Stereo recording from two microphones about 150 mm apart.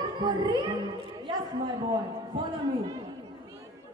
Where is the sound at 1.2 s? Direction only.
30° right (ahead or behind).